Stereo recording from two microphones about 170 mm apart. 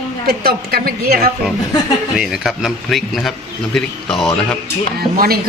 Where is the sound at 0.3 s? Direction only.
65° right (ahead or behind).